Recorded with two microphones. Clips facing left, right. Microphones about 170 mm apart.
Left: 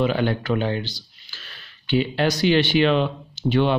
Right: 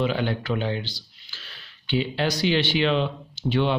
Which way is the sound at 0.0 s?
50° left (ahead or behind).